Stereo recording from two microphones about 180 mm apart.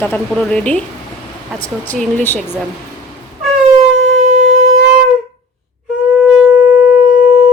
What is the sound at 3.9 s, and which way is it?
Shofar, 90° right.